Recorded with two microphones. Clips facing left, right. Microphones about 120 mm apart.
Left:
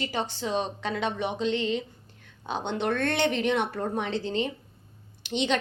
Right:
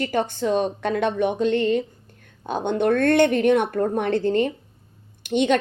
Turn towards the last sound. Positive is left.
turn(degrees=-50)  # may be behind; listen again after turning